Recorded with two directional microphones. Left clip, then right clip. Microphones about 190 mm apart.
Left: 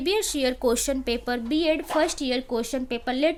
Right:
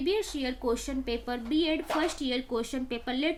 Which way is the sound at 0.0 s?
60° left (ahead or behind).